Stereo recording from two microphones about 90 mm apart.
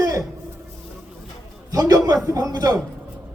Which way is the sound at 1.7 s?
45° right (ahead or behind).